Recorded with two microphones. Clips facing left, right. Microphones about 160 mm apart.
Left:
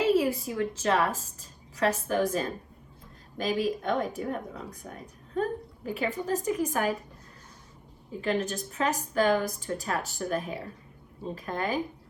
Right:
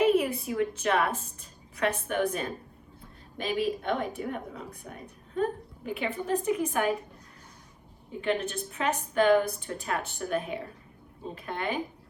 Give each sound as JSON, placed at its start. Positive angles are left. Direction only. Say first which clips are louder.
{"t": 0.0, "sound": "a sound", "louder": "even", "side_deg": 30}
{"t": 0.6, "sound": "a woman's voice", "louder": "left 1 dB", "side_deg": 35}
{"t": 8.2, "sound": "a woman's voice", "louder": "even", "side_deg": 35}